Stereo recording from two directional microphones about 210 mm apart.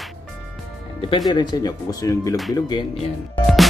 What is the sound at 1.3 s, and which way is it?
Speech, 20° left (ahead or behind).